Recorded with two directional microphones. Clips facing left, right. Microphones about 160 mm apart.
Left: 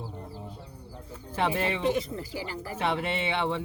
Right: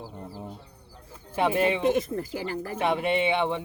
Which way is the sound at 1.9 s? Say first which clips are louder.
Right 3 dB; 50° right (ahead or behind).